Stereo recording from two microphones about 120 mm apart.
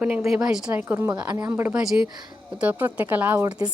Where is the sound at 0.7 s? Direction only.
20° right (ahead or behind).